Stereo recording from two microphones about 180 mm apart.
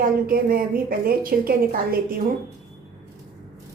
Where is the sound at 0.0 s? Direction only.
55° right (ahead or behind).